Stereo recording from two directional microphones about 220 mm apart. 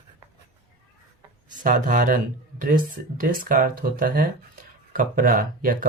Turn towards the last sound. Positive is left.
turn(degrees=-40)  # may be behind; listen again after turning